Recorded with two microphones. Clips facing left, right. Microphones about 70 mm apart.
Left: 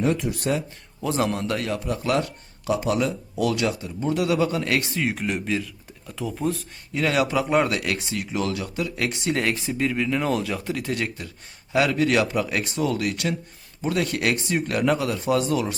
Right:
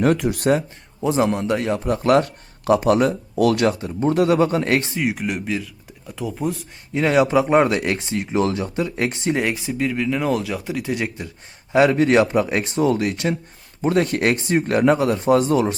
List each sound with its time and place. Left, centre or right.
0.0 s speech: right
1.0 s speech: right
1.8 s speech: right
4.9 s speech: centre
6.9 s speech: right
9.3 s speech: centre
9.7 s speech: centre
11.7 s speech: right